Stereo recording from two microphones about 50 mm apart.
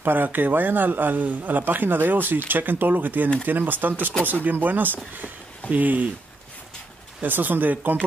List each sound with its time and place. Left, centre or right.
0.0 s speech: right
7.2 s speech: right